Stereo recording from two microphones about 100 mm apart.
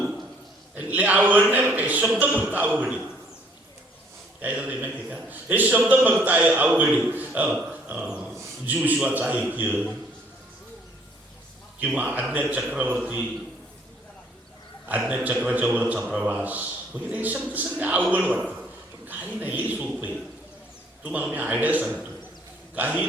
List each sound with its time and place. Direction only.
0.8 s a man's voice: 15° right (ahead or behind)
4.4 s a man's voice: 15° right (ahead or behind)
7.7 s a sound: 15° right (ahead or behind)
8.4 s a man's voice: 15° right (ahead or behind)
11.9 s a man's voice: 15° right (ahead or behind)
14.8 s a man's voice: 15° right (ahead or behind)